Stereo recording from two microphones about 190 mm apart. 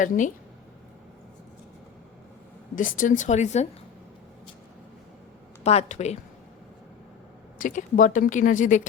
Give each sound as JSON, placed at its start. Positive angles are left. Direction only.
{"t": 0.0, "sound": "speech", "side_deg": 45}
{"t": 2.7, "sound": "speech", "side_deg": 45}
{"t": 5.6, "sound": "speech", "side_deg": 35}
{"t": 7.6, "sound": "speech", "side_deg": 45}